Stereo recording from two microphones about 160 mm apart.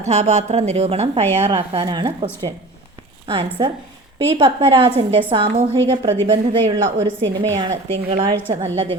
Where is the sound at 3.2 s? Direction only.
35° right (ahead or behind).